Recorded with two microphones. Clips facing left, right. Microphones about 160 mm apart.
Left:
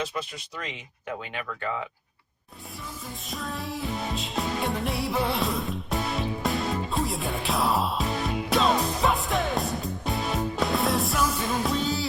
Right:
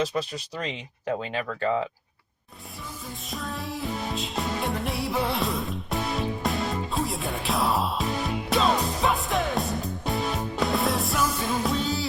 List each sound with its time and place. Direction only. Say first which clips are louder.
0.0 s speech: right 5 dB; 35° right (ahead or behind)
3.2 s music: even; centre (ahead or behind)